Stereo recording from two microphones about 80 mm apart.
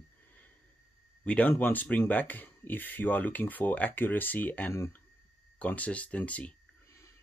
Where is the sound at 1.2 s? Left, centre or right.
Centre.